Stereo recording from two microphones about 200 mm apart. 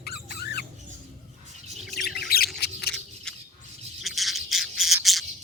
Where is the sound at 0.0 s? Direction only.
50° left (ahead or behind).